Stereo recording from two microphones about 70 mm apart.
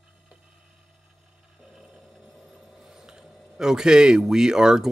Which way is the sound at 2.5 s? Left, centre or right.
Centre.